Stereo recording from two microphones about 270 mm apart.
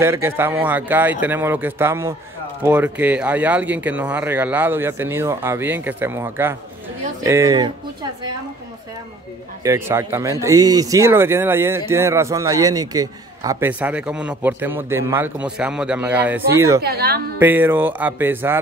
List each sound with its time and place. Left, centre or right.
0.0 s speech: centre
9.6 s speech: centre
16.8 s a woman's voice: right
17.4 s speech: centre